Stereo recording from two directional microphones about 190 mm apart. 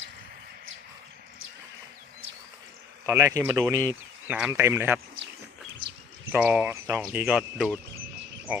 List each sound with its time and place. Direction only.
3.1 s speech: 15° right (ahead or behind)
6.3 s speech: 10° right (ahead or behind)